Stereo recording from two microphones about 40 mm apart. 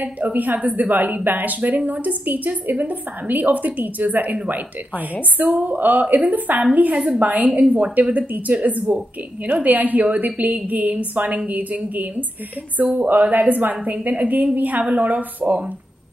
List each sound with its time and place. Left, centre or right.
0.0 s a woman's voice: right
5.4 s a woman's voice: right
14.8 s speech: right
15.0 s speech: right